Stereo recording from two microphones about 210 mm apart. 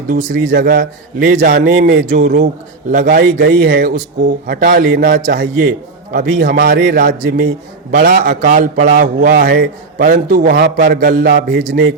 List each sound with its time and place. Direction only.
0.4 s a man's voice: 50° right (ahead or behind)
1.5 s a man's voice: 55° right (ahead or behind)
2.9 s a man's voice: 40° right (ahead or behind); by 11.9 s 55° right (ahead or behind)